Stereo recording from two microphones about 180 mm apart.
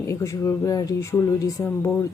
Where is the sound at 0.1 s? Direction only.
15° left (ahead or behind).